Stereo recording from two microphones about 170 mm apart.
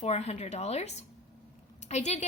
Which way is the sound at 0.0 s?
40° left (ahead or behind).